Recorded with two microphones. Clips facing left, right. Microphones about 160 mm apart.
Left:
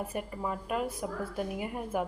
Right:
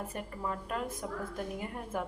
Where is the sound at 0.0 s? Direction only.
10° left (ahead or behind).